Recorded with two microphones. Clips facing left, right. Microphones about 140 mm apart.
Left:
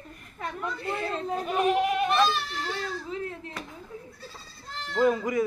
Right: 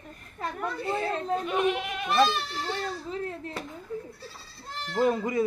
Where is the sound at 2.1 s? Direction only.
30° right (ahead or behind).